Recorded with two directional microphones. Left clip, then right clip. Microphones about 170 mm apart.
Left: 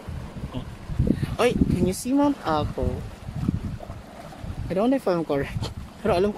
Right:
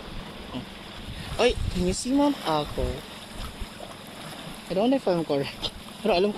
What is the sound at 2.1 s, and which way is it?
Speech, 15° left (ahead or behind).